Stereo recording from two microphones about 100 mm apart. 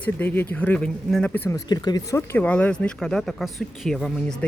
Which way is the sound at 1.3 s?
20° left (ahead or behind).